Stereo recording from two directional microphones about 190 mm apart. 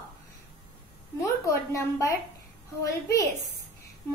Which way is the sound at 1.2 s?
15° left (ahead or behind).